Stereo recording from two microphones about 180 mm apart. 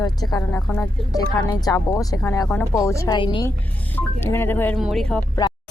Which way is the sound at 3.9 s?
15° left (ahead or behind).